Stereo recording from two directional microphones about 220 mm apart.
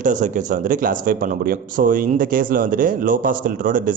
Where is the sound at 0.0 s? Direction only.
35° right (ahead or behind).